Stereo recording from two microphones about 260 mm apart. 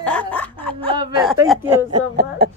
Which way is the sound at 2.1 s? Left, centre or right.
Right.